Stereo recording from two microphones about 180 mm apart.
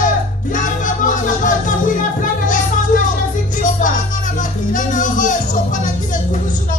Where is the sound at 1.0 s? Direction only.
45° left (ahead or behind).